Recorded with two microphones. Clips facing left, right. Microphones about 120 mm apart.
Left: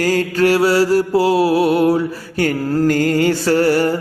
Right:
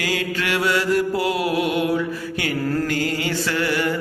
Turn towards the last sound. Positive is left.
turn(degrees=40)  # may be behind; listen again after turning